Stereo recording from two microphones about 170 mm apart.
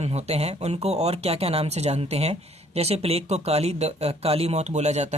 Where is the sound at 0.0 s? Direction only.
40° right (ahead or behind).